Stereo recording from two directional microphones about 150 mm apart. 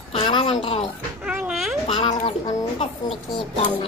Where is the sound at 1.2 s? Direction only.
5° right (ahead or behind).